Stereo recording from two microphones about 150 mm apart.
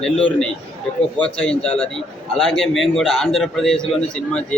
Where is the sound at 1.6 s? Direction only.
40° left (ahead or behind).